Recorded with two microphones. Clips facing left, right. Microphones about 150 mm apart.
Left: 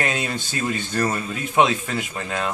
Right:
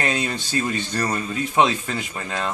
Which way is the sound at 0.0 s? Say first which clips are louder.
Right 1 dB; 5° left (ahead or behind).